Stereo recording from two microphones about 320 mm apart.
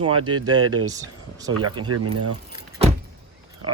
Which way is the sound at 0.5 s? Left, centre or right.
Right.